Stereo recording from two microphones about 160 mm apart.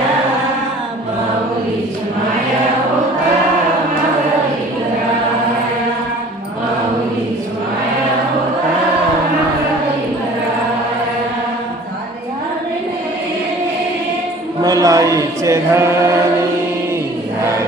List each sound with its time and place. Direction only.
14.6 s chant: 20° right (ahead or behind)